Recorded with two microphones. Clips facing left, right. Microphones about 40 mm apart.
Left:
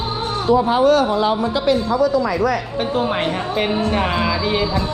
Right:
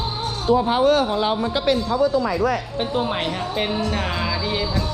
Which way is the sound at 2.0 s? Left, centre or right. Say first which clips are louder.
Left 2 dB; left.